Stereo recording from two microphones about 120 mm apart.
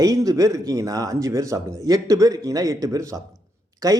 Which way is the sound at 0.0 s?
30° right (ahead or behind).